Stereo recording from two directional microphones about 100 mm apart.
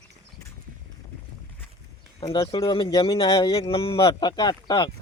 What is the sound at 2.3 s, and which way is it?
Speech, 60° left (ahead or behind).